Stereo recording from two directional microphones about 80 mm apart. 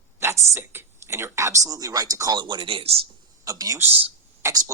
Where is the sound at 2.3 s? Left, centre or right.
Right.